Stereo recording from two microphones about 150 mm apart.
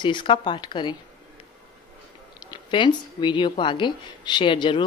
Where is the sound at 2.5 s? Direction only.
30° left (ahead or behind).